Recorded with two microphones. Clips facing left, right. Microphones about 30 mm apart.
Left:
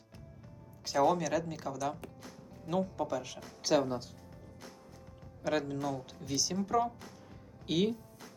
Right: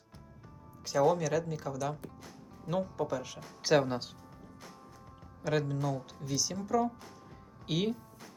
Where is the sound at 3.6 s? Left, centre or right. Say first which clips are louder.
Right 2 dB; centre.